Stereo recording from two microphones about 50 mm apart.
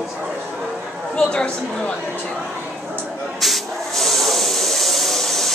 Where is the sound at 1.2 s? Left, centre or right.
Centre.